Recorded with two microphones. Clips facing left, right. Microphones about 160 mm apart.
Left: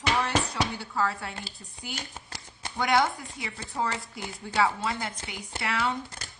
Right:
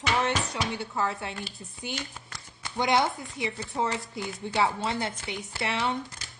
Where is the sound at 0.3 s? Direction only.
20° right (ahead or behind).